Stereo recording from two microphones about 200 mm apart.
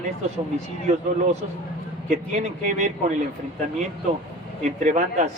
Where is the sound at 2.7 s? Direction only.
35° right (ahead or behind).